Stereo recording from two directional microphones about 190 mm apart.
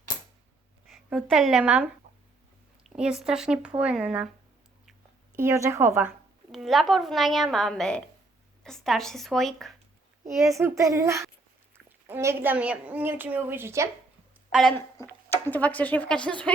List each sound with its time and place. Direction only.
0.9 s a woman's voice: centre (ahead or behind)
5.4 s a woman's voice: 15° right (ahead or behind); by 9.7 s centre (ahead or behind)
10.5 s a woman's voice: 15° right (ahead or behind)
14.5 s a woman's voice: centre (ahead or behind)